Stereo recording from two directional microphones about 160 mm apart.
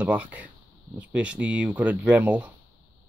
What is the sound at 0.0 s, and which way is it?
Speech, 10° right (ahead or behind).